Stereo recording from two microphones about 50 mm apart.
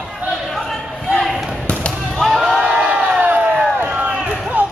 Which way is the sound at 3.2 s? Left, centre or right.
Right.